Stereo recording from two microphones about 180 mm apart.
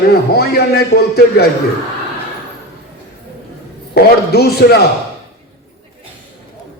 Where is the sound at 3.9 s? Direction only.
60° left (ahead or behind).